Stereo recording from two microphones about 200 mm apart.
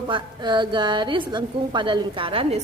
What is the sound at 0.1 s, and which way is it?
A woman's voice, 25° right (ahead or behind).